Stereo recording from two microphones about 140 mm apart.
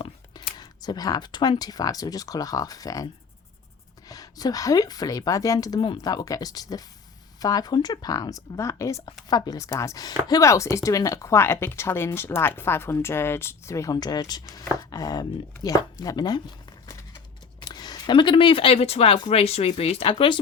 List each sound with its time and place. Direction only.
0.5 s speech: 30° left (ahead or behind)
4.1 s speech: 25° left (ahead or behind)
17.7 s speech: 30° left (ahead or behind)